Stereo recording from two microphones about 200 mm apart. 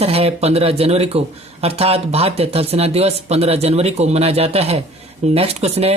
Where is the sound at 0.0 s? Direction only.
30° right (ahead or behind).